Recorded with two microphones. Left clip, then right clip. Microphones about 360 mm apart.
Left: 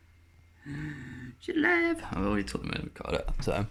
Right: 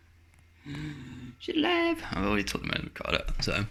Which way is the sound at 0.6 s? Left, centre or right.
Centre.